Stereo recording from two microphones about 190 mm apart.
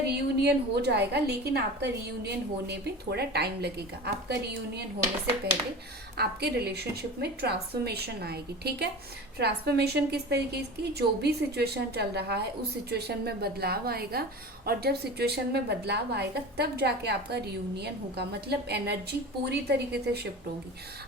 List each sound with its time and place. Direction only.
0.0 s a woman's voice: 60° right (ahead or behind)
6.1 s a woman's voice: 60° right (ahead or behind)